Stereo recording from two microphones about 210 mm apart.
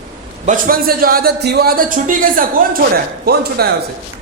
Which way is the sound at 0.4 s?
40° right (ahead or behind).